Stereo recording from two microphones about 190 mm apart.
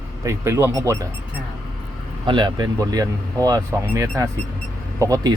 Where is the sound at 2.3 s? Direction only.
25° right (ahead or behind).